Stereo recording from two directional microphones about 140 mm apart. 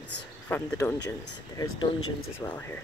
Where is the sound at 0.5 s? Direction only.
15° left (ahead or behind).